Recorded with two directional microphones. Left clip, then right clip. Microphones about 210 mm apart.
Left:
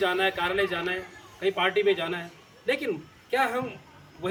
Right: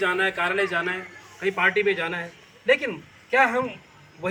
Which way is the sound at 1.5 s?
30° left (ahead or behind).